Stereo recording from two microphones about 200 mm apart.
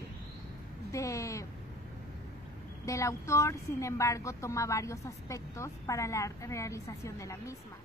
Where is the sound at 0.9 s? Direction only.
15° left (ahead or behind).